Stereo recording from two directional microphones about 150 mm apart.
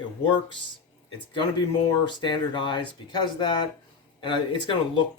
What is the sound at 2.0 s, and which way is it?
Speech, 30° left (ahead or behind).